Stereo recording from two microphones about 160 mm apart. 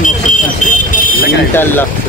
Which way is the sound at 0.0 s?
55° left (ahead or behind).